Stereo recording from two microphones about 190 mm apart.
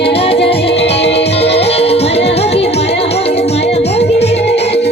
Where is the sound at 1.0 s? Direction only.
65° left (ahead or behind).